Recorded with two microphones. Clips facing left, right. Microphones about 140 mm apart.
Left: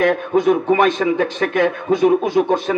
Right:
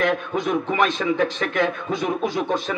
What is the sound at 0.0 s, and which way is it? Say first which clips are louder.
A man's voice: left 7 dB; 50° left (ahead or behind).